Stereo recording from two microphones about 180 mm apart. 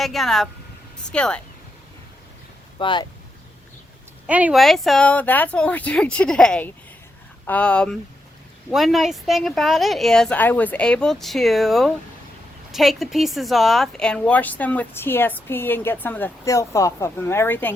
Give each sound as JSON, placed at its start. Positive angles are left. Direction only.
{"t": 0.0, "sound": "speech", "side_deg": 0}
{"t": 2.7, "sound": "speech", "side_deg": 25}
{"t": 4.3, "sound": "a woman's voice", "side_deg": -10}